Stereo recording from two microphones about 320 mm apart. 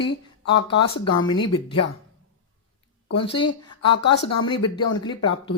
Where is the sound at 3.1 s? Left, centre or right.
Centre.